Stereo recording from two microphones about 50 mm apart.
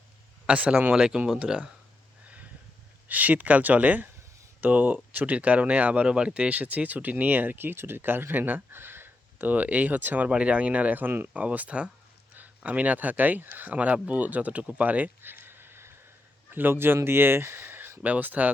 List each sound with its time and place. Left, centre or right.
0.4 s speech: right
2.2 s a sound: right
3.1 s speech: right
10.2 s speech: right
11.3 s speech: right
18.0 s speech: right